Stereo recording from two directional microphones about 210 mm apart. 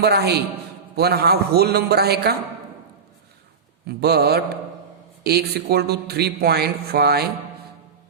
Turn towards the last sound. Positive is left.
turn(degrees=-50)  # may be behind; listen again after turning